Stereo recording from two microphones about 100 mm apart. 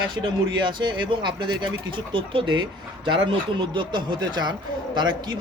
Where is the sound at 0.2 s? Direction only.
50° right (ahead or behind).